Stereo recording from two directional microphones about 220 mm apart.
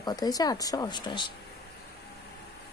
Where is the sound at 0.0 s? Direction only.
15° left (ahead or behind).